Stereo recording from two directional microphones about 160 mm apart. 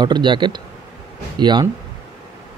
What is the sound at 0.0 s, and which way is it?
Speech, 30° right (ahead or behind).